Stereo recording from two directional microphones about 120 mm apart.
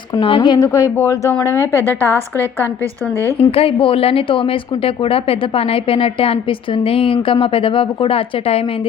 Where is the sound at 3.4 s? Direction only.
50° left (ahead or behind).